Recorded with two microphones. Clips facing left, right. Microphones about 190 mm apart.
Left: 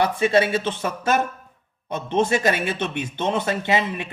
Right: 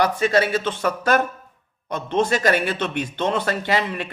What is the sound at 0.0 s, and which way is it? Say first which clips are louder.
A man's voice: even; 25° left (ahead or behind).